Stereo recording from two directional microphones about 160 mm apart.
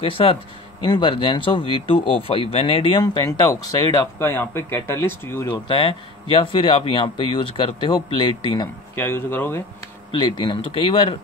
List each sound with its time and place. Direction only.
0.0 s speech: 35° left (ahead or behind); by 5.6 s 15° left (ahead or behind)
5.7 s speech: 30° left (ahead or behind)
8.9 s speech: 15° left (ahead or behind)
10.1 s speech: 30° left (ahead or behind)